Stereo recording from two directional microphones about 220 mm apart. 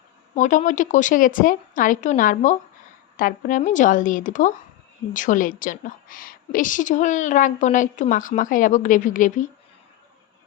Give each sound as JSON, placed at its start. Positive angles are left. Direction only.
{"t": 0.3, "sound": "a woman's voice", "side_deg": 35}